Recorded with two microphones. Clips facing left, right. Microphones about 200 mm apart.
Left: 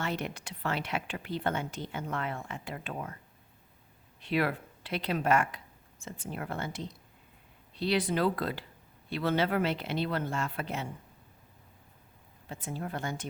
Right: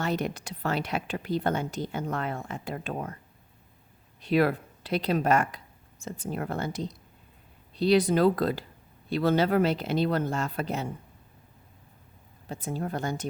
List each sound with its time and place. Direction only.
0.0 s a woman's voice: 40° right (ahead or behind)
4.2 s a woman's voice: 40° right (ahead or behind)
12.5 s a woman's voice: 40° right (ahead or behind)